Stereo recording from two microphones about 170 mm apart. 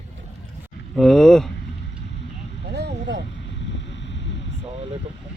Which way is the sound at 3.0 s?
90° right.